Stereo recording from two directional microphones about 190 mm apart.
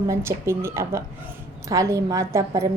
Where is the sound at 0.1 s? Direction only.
15° right (ahead or behind).